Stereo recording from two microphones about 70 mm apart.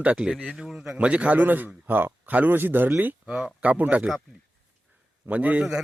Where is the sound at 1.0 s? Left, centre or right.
Centre.